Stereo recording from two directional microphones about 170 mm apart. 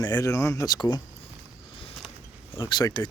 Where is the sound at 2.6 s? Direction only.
25° left (ahead or behind).